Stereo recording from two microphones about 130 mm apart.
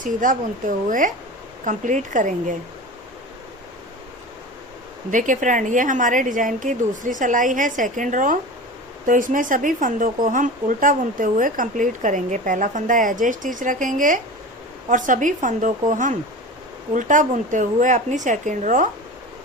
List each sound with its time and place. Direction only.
0.0 s speech: 90° right
1.6 s speech: 75° right (ahead or behind)
5.1 s a woman's voice: 80° right